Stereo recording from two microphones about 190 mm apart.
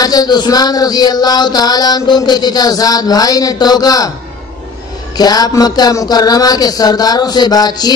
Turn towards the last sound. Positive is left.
turn(degrees=20)  # may be behind; listen again after turning